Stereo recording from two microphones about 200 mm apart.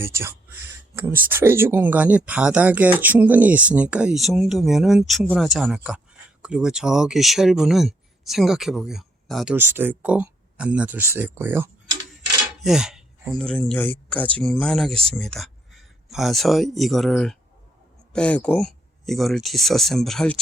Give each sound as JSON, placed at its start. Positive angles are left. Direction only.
{"t": 0.0, "sound": "speech", "side_deg": -10}